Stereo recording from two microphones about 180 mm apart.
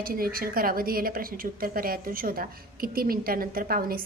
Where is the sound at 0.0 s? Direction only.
55° right (ahead or behind).